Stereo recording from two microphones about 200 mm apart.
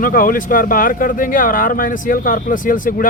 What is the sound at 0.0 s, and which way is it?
Speech, 45° left (ahead or behind).